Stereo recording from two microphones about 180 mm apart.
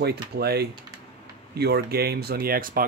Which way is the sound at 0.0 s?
65° right (ahead or behind).